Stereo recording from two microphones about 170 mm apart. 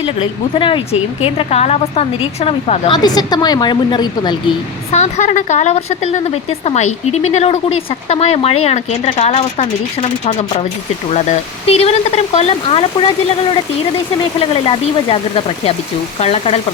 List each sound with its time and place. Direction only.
0.0 s speech: 35° left (ahead or behind)
2.9 s a woman's voice: 25° left (ahead or behind)
4.9 s speech: 40° left (ahead or behind)